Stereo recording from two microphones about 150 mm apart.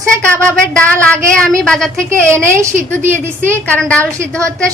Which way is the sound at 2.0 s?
20° right (ahead or behind).